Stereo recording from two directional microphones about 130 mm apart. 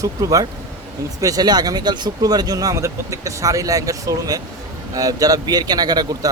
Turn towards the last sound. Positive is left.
turn(degrees=-30)  # may be behind; listen again after turning